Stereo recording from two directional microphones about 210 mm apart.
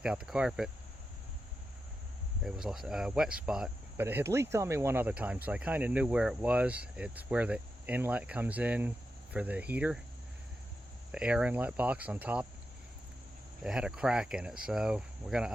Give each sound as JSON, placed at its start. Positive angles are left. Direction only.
{"t": 0.0, "sound": "speech", "side_deg": -5}
{"t": 2.4, "sound": "speech", "side_deg": 0}
{"t": 11.1, "sound": "speech", "side_deg": -5}
{"t": 13.7, "sound": "speech", "side_deg": -5}